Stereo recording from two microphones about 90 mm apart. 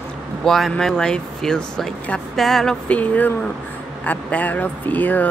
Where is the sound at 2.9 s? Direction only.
15° left (ahead or behind).